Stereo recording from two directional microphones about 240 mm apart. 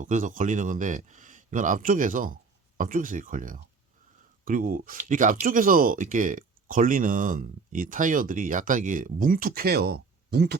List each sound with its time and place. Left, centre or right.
0.0 s speech: right